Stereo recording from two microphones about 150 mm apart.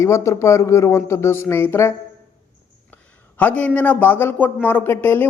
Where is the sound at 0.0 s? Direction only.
20° left (ahead or behind).